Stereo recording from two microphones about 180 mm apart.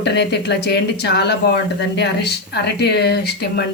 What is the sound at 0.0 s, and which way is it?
Speech, 70° left (ahead or behind).